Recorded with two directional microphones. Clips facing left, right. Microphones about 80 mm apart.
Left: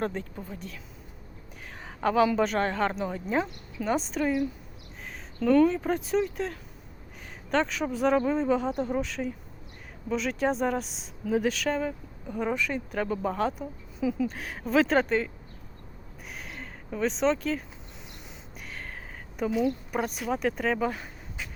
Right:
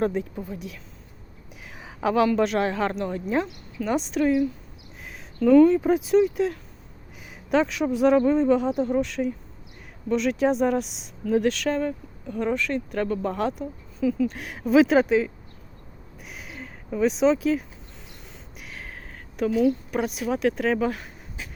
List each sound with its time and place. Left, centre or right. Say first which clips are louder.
0.0 s speech: right 6 dB; centre
1.8 s speech: right 2 dB; centre
14.0 s speech: right 4 dB; centre
14.3 s speech: right 6 dB; centre
16.3 s a sound: right 1 dB; centre
18.6 s a sound: right 1 dB; centre
20.0 s speech: right 4 dB; centre